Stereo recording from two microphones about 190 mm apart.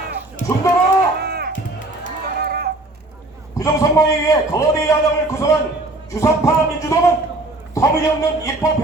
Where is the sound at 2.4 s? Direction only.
55° right (ahead or behind).